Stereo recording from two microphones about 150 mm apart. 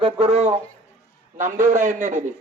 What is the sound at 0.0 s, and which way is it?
Speech, 45° right (ahead or behind).